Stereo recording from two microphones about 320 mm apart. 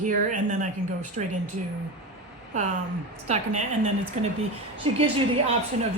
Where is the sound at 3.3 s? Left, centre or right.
Right.